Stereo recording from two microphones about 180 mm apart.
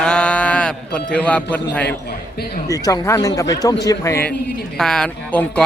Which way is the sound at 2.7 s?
20° left (ahead or behind).